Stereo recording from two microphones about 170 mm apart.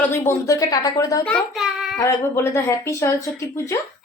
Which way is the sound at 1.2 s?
5° left (ahead or behind).